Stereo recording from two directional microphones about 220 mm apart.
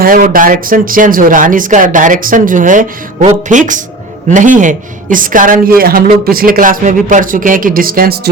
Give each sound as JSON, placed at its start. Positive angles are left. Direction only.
{"t": 0.0, "sound": "a woman's voice", "side_deg": -40}